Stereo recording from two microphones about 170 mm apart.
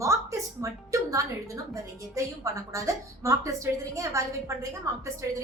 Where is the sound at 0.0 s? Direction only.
15° right (ahead or behind).